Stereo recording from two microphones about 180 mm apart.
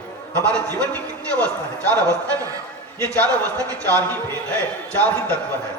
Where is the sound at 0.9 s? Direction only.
10° left (ahead or behind).